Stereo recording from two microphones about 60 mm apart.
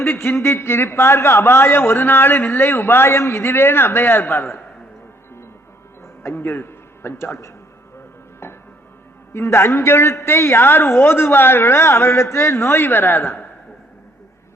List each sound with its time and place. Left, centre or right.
0.0 s a man's voice: left
3.1 s a man's voice: left
6.2 s a man's voice: left
9.3 s a man's voice: left